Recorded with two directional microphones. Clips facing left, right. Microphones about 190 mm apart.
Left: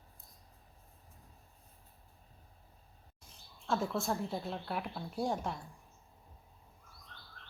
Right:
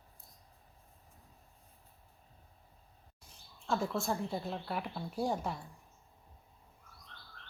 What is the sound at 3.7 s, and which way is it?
A woman's voice, centre (ahead or behind).